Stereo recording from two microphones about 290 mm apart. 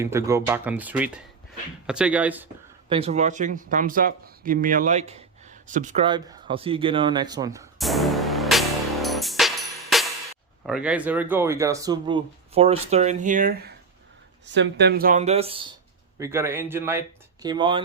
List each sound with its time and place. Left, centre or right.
0.0 s speech: centre
2.9 s speech: right
7.8 s music: centre
10.7 s speech: centre